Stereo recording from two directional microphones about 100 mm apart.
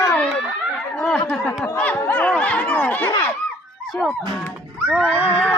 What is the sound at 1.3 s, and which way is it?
Speech, 20° left (ahead or behind).